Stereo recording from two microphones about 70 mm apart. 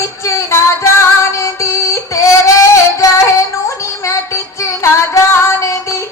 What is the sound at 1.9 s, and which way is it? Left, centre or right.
Child singing, left.